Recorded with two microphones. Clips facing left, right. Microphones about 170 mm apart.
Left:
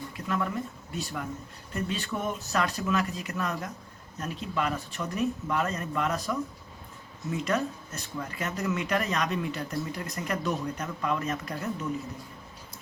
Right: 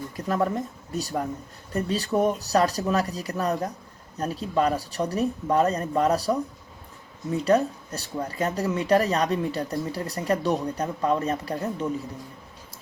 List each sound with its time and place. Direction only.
0.2 s speech: 40° right (ahead or behind)